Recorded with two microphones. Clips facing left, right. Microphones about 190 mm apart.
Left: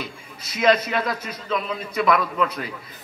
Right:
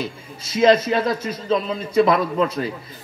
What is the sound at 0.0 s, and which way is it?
A man's voice, 25° right (ahead or behind).